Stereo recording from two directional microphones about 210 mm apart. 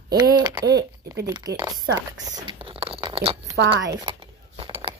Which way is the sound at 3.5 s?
55° right (ahead or behind).